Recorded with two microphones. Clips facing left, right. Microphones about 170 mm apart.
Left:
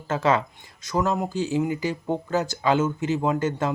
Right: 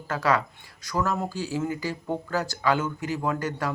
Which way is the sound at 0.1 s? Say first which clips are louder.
Left 3 dB; 25° left (ahead or behind).